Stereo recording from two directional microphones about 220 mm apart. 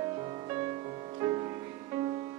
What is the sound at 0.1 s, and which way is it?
Music, 20° right (ahead or behind).